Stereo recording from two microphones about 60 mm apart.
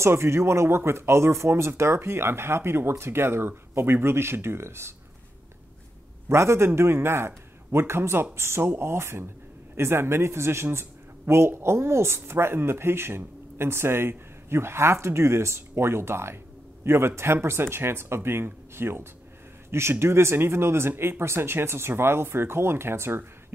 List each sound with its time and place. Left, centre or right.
0.0 s a man's voice: right
6.2 s a man's voice: right